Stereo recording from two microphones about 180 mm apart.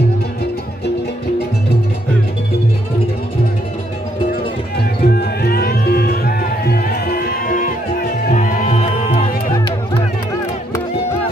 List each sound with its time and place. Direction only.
4.7 s music: 60° left (ahead or behind); by 9.3 s 35° left (ahead or behind)